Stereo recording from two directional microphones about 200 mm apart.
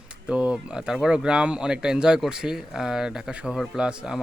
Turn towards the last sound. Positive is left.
turn(degrees=-5)  # may be behind; listen again after turning